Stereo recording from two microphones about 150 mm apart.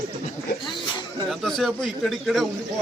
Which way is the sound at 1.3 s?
Centre (ahead or behind).